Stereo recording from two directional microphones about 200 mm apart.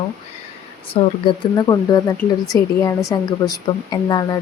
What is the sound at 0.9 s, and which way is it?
A woman's voice, 25° left (ahead or behind).